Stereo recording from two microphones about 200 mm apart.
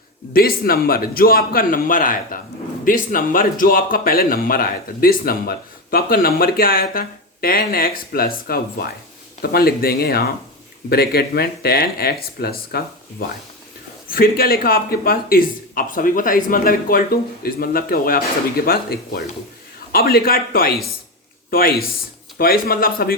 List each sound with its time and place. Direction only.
0.3 s speech: 50° left (ahead or behind)